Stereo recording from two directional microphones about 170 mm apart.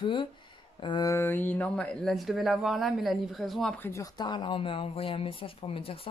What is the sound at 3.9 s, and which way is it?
Speech, 20° left (ahead or behind).